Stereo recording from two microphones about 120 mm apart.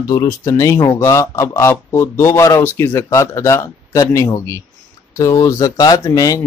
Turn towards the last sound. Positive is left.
turn(degrees=30)  # may be behind; listen again after turning